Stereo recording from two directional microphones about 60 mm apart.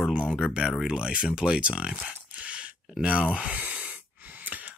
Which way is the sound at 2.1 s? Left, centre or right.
Right.